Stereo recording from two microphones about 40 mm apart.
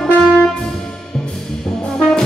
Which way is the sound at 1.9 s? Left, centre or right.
Centre.